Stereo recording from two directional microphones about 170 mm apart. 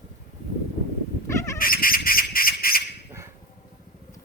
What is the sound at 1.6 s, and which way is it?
Squeal, 55° left (ahead or behind).